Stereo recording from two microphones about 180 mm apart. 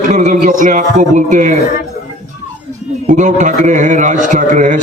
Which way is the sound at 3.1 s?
45° right (ahead or behind).